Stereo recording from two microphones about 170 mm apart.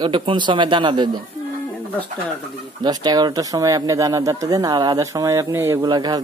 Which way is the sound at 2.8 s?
25° right (ahead or behind).